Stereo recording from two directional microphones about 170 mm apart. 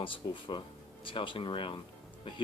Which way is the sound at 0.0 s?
30° left (ahead or behind).